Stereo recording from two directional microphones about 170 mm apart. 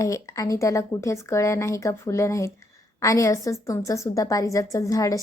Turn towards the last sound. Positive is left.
turn(degrees=20)  # may be behind; listen again after turning